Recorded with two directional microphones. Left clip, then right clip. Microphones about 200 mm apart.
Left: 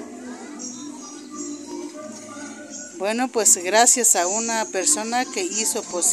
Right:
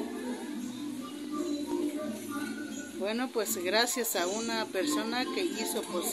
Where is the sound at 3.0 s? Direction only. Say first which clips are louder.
Left 10 dB; 40° left (ahead or behind).